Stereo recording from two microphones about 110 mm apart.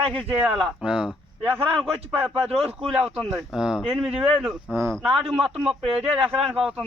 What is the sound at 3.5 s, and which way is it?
Speech, 5° right (ahead or behind).